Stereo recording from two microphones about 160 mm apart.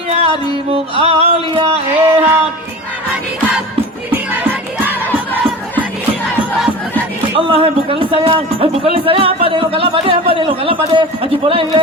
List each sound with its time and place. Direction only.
0.1 s music: 40° right (ahead or behind)
2.0 s a sound: 15° right (ahead or behind)
7.3 s a man's voice: 35° right (ahead or behind)